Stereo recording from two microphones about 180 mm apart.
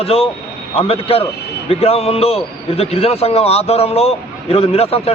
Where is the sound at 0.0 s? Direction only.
35° left (ahead or behind).